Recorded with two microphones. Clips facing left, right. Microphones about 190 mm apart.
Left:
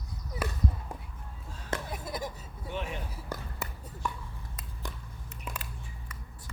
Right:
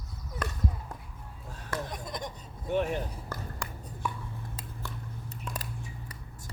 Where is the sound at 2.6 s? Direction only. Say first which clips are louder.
Right 8 dB; 50° right (ahead or behind).